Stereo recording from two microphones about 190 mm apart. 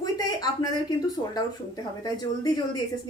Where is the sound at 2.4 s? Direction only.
20° left (ahead or behind).